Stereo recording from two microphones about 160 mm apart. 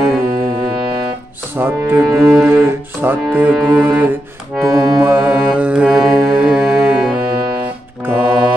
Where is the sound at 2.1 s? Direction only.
Centre (ahead or behind).